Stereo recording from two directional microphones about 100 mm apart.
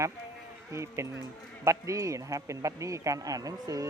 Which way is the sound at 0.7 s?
30° right (ahead or behind).